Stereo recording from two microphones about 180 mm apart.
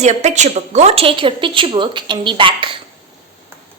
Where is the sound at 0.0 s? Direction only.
40° right (ahead or behind).